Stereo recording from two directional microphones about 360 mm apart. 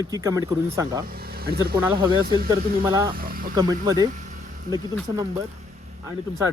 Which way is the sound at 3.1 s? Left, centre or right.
Right.